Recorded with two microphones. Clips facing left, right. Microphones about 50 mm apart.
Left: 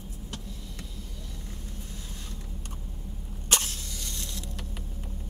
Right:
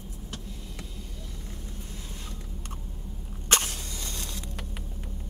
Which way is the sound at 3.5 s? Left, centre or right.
Right.